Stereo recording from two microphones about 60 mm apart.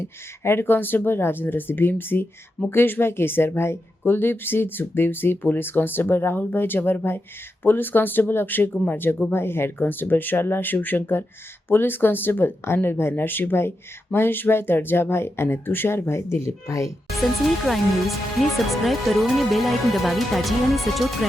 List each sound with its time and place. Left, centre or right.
0.4 s speech: left
17.2 s speech: centre